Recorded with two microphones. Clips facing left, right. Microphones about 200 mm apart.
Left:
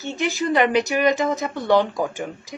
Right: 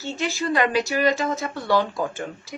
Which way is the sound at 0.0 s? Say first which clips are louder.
Left 3 dB; 15° left (ahead or behind).